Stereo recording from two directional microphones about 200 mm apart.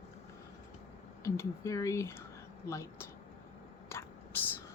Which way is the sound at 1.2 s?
15° left (ahead or behind).